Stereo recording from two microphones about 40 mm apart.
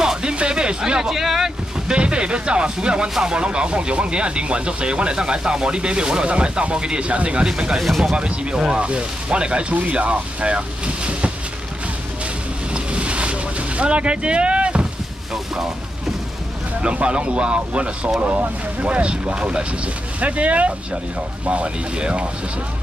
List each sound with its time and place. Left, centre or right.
0.0 s music: right
1.9 s speech: right
11.1 s a sound: right
12.7 s boat: right
16.8 s speech: right